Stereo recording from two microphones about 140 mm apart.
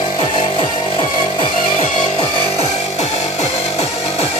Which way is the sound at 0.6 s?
40° left (ahead or behind).